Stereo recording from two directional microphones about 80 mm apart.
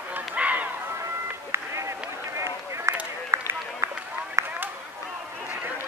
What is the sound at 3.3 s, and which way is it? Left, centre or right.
Run, right.